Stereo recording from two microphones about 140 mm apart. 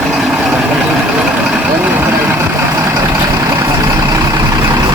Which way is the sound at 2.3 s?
20° right (ahead or behind).